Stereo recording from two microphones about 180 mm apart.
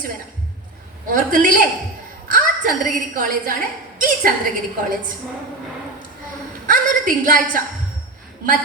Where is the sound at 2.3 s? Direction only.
50° right (ahead or behind).